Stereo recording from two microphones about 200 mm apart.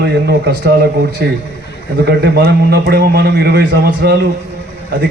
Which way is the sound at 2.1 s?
55° right (ahead or behind).